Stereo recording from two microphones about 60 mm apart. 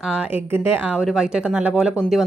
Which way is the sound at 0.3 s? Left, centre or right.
Right.